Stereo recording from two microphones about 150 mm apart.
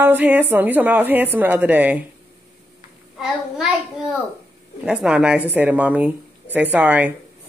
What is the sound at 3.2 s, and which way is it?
Speech, 5° right (ahead or behind).